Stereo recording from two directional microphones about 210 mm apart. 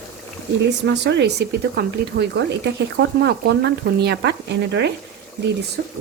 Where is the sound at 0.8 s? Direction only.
55° right (ahead or behind).